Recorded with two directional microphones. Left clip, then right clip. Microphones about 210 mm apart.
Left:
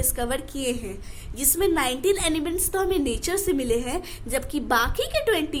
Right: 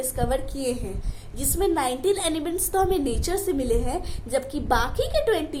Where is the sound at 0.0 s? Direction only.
35° left (ahead or behind).